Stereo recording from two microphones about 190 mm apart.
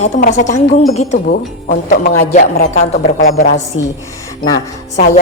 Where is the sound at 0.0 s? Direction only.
40° left (ahead or behind).